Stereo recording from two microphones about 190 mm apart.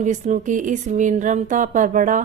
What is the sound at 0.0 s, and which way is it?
Speech, 40° right (ahead or behind).